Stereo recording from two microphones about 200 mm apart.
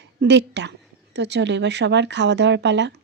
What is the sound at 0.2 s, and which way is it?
Speech, 60° right (ahead or behind).